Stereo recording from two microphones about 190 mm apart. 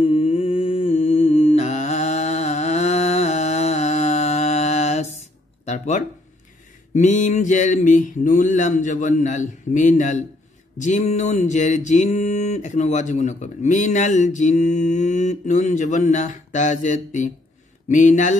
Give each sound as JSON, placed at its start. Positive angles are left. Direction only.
{"t": 0.0, "sound": "music", "side_deg": 30}
{"t": 5.7, "sound": "a sound", "side_deg": 40}
{"t": 6.9, "sound": "mantra", "side_deg": 40}